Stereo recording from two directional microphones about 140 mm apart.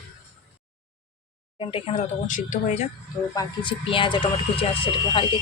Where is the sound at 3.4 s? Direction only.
35° left (ahead or behind).